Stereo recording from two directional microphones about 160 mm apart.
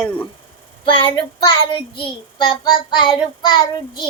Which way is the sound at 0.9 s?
30° left (ahead or behind).